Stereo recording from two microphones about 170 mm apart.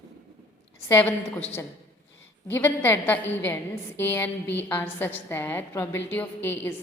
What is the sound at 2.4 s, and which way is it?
A woman's voice, 10° left (ahead or behind).